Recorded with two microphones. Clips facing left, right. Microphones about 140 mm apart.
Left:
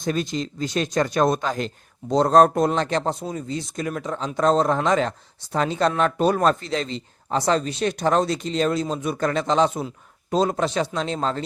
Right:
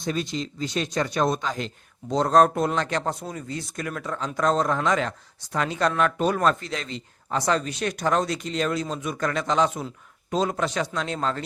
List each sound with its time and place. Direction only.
0.0 s speech: 50° left (ahead or behind); by 11.4 s 25° left (ahead or behind)